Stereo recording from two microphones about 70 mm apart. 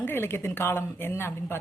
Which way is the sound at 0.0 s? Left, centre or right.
Left.